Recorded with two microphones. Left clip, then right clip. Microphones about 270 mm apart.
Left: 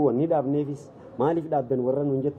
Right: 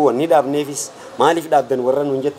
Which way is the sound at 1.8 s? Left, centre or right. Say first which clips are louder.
Right 8 dB; centre.